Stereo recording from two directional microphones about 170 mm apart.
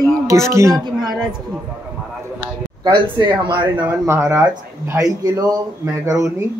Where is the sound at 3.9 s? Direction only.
15° right (ahead or behind).